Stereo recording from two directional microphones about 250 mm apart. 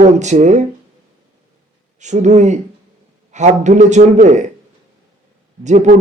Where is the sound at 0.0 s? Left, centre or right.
Right.